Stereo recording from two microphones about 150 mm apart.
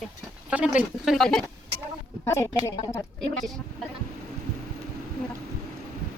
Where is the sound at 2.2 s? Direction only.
20° left (ahead or behind).